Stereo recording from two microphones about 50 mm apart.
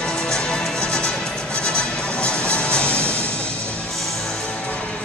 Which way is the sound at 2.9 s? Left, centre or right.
Right.